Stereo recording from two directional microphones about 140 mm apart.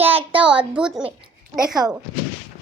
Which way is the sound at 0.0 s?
15° right (ahead or behind).